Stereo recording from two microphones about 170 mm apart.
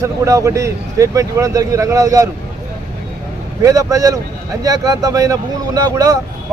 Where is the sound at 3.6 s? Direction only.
20° right (ahead or behind).